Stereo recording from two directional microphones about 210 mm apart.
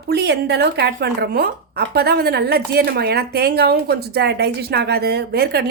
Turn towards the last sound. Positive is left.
turn(degrees=-50)  # may be behind; listen again after turning